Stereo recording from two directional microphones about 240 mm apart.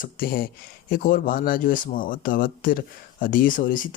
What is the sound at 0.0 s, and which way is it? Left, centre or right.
Speech, left.